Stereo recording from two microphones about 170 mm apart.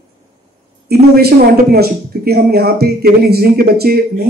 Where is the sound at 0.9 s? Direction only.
65° right (ahead or behind).